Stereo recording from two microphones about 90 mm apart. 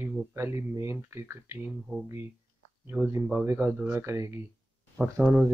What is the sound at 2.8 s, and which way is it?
Speech, 20° right (ahead or behind).